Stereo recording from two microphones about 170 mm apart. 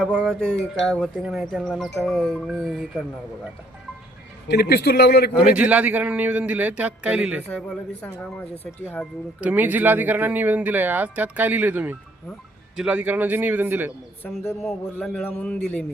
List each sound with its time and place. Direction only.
0.0 s speech: 5° left (ahead or behind)
4.4 s a man's voice: 75° left (ahead or behind)
5.3 s speech: 5° right (ahead or behind)
8.0 s a man's voice: 10° left (ahead or behind)
9.4 s speech: 10° right (ahead or behind)
14.2 s a man's voice: 5° left (ahead or behind)